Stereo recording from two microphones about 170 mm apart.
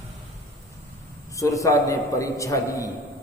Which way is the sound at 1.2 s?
20° left (ahead or behind).